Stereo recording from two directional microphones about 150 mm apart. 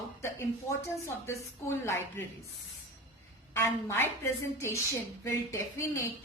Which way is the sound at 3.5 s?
15° left (ahead or behind).